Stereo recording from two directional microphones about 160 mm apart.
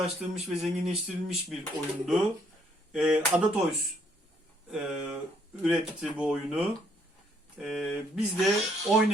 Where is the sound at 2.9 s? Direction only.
5° right (ahead or behind).